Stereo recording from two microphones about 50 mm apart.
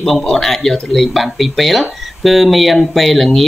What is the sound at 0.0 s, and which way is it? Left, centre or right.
Speech, centre.